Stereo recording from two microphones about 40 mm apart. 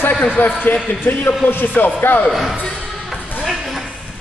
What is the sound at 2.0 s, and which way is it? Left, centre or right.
Speech, left.